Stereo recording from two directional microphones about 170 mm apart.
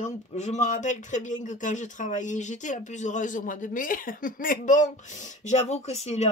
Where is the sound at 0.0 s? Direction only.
45° left (ahead or behind).